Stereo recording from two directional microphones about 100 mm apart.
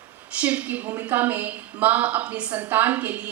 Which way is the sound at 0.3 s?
15° right (ahead or behind).